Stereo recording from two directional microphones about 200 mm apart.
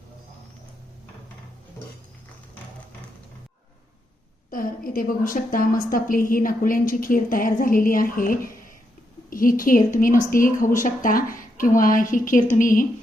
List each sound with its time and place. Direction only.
4.5 s a woman's voice: 45° left (ahead or behind)